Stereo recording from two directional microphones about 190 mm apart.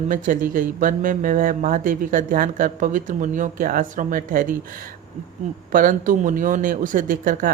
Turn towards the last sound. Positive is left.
turn(degrees=-45)  # may be behind; listen again after turning